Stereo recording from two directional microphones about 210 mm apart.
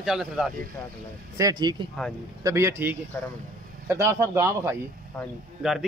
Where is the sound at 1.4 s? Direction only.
20° right (ahead or behind).